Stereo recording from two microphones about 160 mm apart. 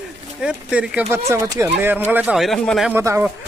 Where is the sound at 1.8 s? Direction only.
10° right (ahead or behind).